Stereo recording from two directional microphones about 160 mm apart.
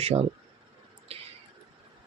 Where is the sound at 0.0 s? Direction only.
40° right (ahead or behind).